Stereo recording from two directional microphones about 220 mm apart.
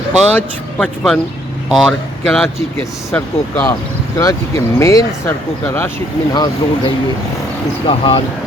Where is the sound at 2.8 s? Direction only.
15° left (ahead or behind).